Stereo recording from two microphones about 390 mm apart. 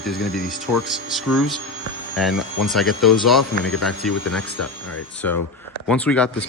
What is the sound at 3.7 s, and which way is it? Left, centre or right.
Speech, left.